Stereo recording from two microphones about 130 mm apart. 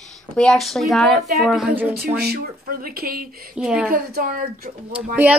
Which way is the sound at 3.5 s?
5° right (ahead or behind).